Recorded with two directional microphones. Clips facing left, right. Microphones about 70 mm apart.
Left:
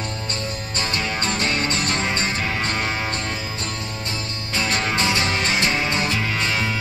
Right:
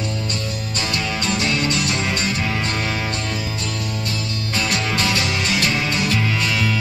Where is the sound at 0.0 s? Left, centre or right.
Left.